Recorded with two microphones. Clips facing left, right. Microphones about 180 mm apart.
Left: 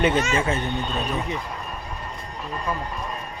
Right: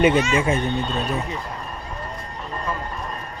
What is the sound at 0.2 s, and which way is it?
Speech, 45° left (ahead or behind).